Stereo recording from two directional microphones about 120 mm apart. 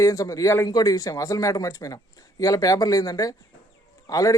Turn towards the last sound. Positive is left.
turn(degrees=30)  # may be behind; listen again after turning